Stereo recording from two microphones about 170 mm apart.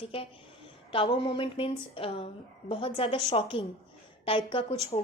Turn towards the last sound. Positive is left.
turn(degrees=30)  # may be behind; listen again after turning